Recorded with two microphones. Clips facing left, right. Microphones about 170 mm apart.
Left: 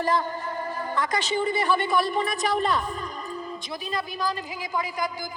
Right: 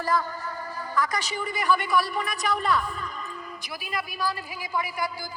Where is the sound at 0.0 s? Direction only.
25° left (ahead or behind).